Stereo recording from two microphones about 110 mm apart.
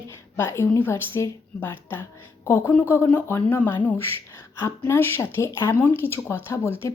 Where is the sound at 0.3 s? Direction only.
25° left (ahead or behind).